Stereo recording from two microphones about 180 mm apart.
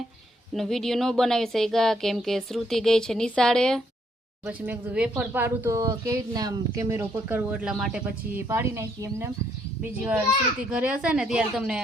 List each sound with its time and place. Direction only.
0.5 s speech: centre (ahead or behind)
4.4 s speech: 10° right (ahead or behind)
8.4 s speech: 15° right (ahead or behind)